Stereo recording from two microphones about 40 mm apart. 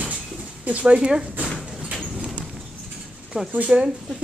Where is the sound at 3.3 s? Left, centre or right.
Right.